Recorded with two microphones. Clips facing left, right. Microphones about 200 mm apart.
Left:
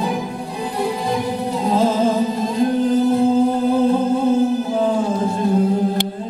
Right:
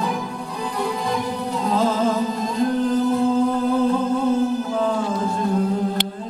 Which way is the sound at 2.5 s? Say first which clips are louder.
Left 3 dB; 10° left (ahead or behind).